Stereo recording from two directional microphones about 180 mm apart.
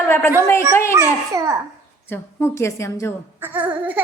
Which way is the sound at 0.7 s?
15° left (ahead or behind).